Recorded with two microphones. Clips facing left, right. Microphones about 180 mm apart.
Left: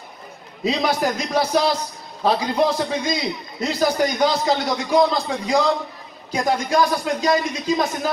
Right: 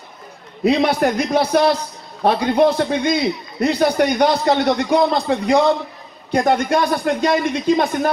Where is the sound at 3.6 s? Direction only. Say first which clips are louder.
Right 4 dB; 60° right (ahead or behind).